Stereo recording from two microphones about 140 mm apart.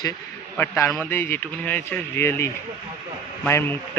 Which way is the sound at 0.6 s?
20° left (ahead or behind).